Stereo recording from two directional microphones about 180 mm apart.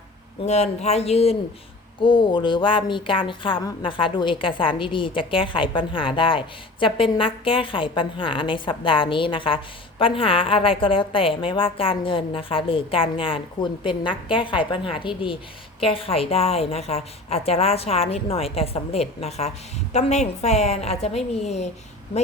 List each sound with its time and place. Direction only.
0.4 s a woman's voice: 40° left (ahead or behind)